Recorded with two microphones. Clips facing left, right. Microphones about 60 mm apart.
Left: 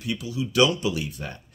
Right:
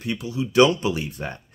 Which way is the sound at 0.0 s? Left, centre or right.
Right.